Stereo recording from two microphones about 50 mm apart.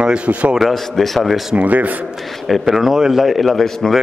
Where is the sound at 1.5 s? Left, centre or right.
Right.